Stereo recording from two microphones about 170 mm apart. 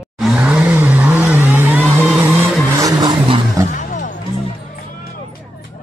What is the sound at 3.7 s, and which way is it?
Music, 50° left (ahead or behind).